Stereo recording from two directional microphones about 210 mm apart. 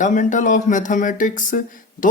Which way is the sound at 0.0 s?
35° left (ahead or behind).